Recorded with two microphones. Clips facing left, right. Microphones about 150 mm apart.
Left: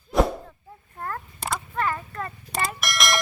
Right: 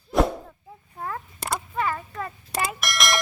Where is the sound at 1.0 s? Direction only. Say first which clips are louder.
Even; 5° right (ahead or behind).